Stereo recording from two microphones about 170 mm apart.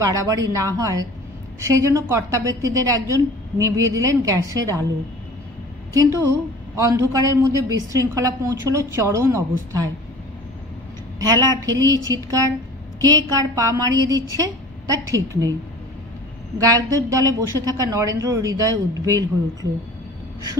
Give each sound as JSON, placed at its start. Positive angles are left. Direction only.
{"t": 0.0, "sound": "a woman's voice", "side_deg": -20}
{"t": 5.9, "sound": "a woman's voice", "side_deg": -20}
{"t": 11.1, "sound": "a woman's voice", "side_deg": -20}
{"t": 16.5, "sound": "a woman's voice", "side_deg": -20}